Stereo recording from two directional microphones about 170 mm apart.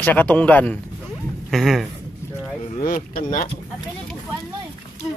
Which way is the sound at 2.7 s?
55° left (ahead or behind).